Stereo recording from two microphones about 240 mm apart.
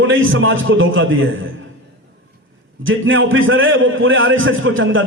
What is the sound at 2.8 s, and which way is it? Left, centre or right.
A man's voice, right.